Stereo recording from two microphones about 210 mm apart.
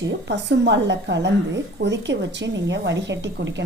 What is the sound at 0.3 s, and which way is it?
A woman's voice, 55° right (ahead or behind).